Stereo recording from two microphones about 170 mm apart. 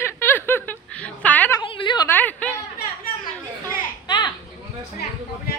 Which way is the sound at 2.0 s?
10° left (ahead or behind).